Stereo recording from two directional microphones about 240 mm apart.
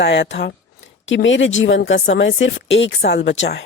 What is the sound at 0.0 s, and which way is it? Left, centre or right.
Speech, left.